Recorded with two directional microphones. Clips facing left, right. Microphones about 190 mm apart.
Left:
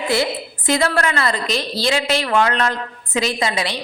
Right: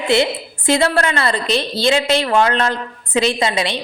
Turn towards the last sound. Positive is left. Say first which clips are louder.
# right 3 dB
turn(degrees=-25)  # may be behind; listen again after turning